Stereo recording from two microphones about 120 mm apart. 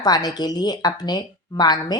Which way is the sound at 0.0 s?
35° left (ahead or behind).